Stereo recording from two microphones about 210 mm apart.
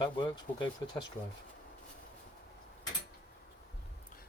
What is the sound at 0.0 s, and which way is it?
Speech, 20° left (ahead or behind).